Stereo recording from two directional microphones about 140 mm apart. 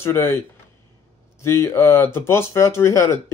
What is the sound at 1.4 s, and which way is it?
Speech, 20° left (ahead or behind).